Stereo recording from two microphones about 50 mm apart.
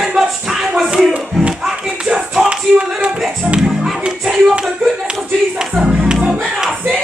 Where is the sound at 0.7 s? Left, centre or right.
Centre.